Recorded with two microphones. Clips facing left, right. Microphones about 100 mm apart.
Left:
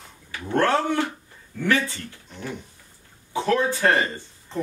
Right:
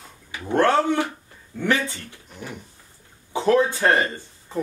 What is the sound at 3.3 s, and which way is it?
Speech, 20° right (ahead or behind).